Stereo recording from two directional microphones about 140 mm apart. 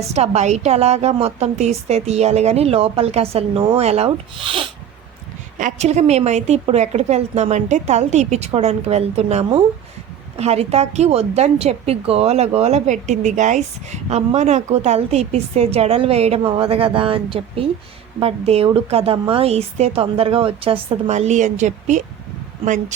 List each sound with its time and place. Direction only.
0.1 s a woman's voice: 50° right (ahead or behind)
5.5 s a woman's voice: 60° right (ahead or behind)